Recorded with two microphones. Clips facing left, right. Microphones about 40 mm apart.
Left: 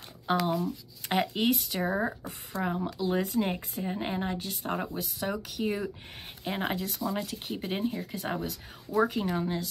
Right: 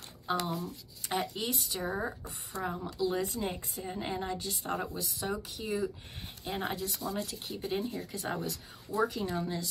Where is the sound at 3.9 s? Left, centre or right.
Left.